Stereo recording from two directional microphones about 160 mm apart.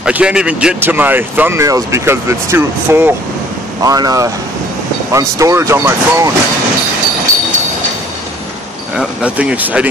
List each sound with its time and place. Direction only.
0.0 s speech: 5° right (ahead or behind)
8.9 s speech: 5° right (ahead or behind)